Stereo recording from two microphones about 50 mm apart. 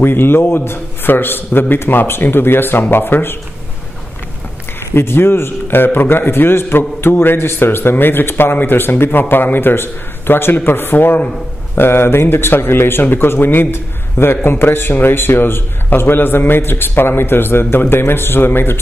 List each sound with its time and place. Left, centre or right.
0.0 s a man's voice: left
4.9 s a man's voice: left